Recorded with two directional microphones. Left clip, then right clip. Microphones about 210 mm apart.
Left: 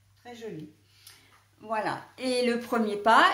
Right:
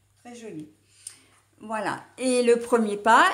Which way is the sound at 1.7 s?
45° right (ahead or behind).